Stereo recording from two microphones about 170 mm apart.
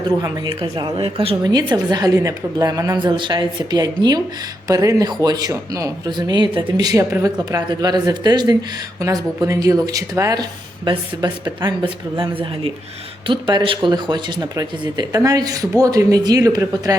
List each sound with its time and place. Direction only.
0.2 s a woman's voice: 25° right (ahead or behind)